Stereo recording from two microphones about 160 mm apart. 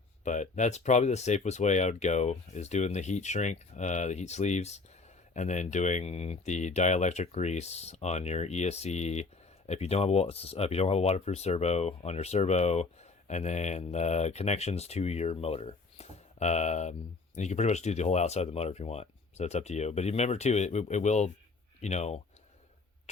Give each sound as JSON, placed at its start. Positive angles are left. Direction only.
{"t": 0.3, "sound": "speech", "side_deg": 50}